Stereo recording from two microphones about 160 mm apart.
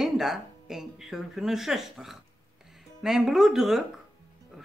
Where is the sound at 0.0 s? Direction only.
Centre (ahead or behind).